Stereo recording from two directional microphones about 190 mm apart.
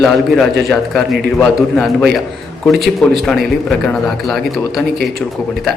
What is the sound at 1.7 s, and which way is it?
A man's voice, centre (ahead or behind).